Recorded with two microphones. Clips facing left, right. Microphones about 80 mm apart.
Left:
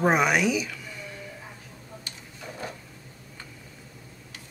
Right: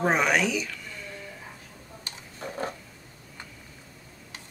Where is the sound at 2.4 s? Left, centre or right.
Right.